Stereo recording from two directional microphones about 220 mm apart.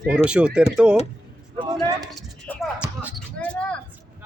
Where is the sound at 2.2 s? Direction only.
Centre (ahead or behind).